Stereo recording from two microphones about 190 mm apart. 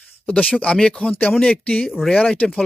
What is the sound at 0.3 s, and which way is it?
Speech, 5° left (ahead or behind).